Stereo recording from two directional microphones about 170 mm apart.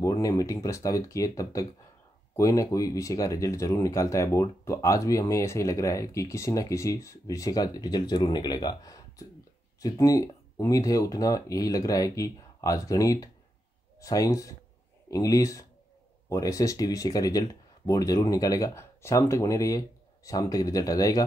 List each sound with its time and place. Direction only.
0.0 s speech: 20° left (ahead or behind)